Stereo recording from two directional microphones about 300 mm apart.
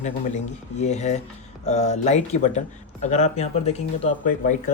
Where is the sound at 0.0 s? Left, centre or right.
Left.